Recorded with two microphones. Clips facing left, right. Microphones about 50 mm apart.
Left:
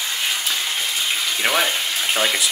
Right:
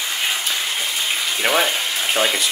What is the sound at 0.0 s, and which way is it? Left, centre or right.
Water, centre.